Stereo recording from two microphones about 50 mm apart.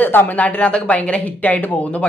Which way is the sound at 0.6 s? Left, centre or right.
Left.